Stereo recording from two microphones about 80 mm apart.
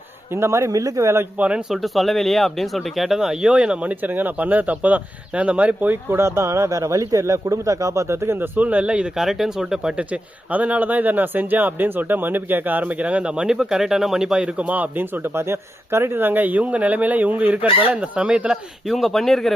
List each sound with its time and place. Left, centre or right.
0.3 s a man's voice: right
1.4 s speech: centre
1.7 s speech: centre
18.9 s speech: centre